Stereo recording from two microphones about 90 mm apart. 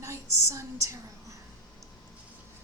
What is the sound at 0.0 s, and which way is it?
Speech, 35° right (ahead or behind).